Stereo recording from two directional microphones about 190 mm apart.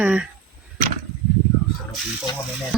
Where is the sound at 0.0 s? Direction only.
5° right (ahead or behind).